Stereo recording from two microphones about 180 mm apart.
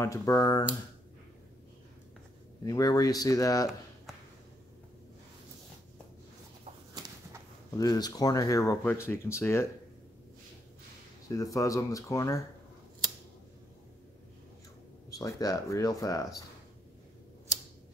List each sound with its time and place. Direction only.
0.0 s speech: 20° left (ahead or behind)
2.6 s speech: 20° left (ahead or behind)
7.0 s a sound: 20° right (ahead or behind)
7.7 s speech: 20° left (ahead or behind)
11.2 s speech: 20° left (ahead or behind)
15.0 s speech: 20° left (ahead or behind)